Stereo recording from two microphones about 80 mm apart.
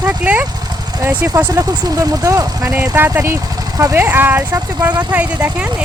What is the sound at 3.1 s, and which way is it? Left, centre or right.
Speech, right.